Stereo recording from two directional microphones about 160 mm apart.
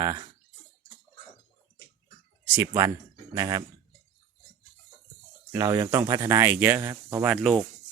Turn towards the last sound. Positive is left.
turn(degrees=-10)  # may be behind; listen again after turning